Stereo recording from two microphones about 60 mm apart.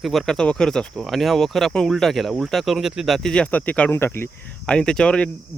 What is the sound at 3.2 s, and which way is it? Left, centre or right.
Speech, centre.